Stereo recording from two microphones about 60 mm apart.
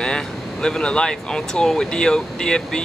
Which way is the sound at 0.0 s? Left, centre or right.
Centre.